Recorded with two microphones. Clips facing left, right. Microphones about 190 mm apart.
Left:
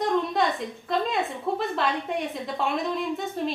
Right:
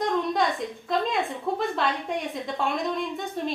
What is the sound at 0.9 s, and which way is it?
A woman's voice, centre (ahead or behind).